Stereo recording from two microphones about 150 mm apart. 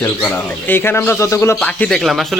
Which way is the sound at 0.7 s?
15° left (ahead or behind).